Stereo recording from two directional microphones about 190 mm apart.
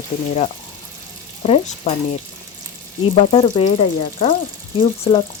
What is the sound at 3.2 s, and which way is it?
Speech, 35° left (ahead or behind).